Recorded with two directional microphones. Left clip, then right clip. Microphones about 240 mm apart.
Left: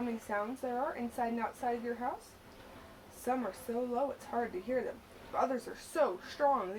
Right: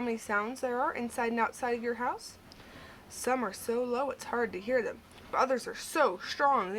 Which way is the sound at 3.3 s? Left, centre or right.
Right.